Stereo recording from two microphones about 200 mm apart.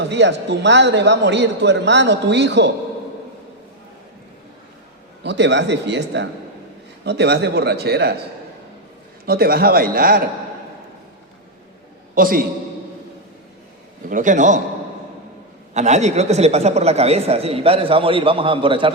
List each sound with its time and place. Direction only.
0.0 s a man's voice: 60° right (ahead or behind)
5.2 s a man's voice: 60° right (ahead or behind)
9.2 s a man's voice: 50° right (ahead or behind)
12.1 s a man's voice: 45° right (ahead or behind)
14.1 s a man's voice: 40° right (ahead or behind)
15.7 s speech: 35° right (ahead or behind)